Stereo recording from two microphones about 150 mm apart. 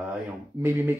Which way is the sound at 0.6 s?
15° right (ahead or behind).